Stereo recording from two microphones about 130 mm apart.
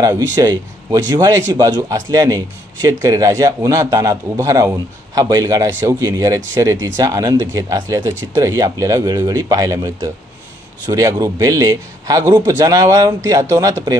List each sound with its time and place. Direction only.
0.1 s a man's voice: 25° right (ahead or behind)